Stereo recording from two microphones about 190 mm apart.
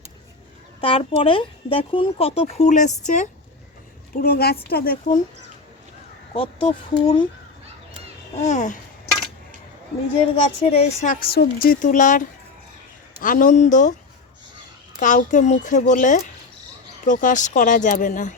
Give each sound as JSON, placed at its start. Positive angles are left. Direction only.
{"t": 0.8, "sound": "speech", "side_deg": 30}
{"t": 4.1, "sound": "speech", "side_deg": 55}
{"t": 6.3, "sound": "speech", "side_deg": 30}
{"t": 8.4, "sound": "a woman's voice", "side_deg": 40}
{"t": 10.2, "sound": "a woman's voice", "side_deg": 30}
{"t": 13.2, "sound": "a woman's voice", "side_deg": 45}
{"t": 14.9, "sound": "a woman's voice", "side_deg": 40}